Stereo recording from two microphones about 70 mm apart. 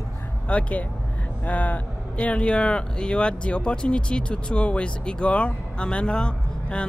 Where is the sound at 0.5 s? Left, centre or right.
Centre.